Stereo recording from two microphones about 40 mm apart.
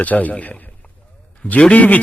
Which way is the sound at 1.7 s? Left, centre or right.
Left.